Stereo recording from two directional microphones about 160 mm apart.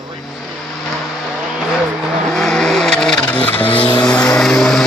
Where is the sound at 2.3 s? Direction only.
5° left (ahead or behind).